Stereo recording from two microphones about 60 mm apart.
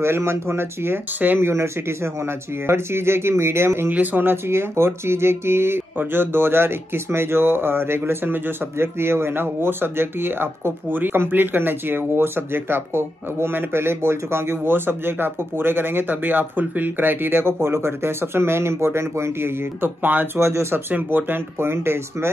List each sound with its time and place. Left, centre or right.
0.0 s speech: right
1.2 s speech: right
1.5 s speech: right
3.9 s speech: right
20.3 s speech: right
20.9 s speech: right